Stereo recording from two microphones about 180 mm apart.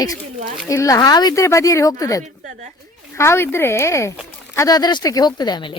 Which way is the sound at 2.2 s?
40° right (ahead or behind).